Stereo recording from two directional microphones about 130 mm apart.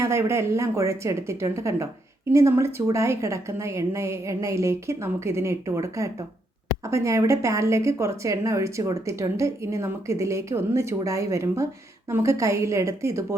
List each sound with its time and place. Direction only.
0.0 s a woman's voice: 20° right (ahead or behind)